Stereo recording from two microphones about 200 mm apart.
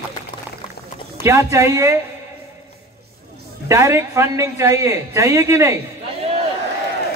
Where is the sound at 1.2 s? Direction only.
15° right (ahead or behind).